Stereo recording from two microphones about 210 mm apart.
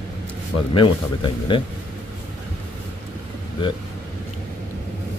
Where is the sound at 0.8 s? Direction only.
25° left (ahead or behind).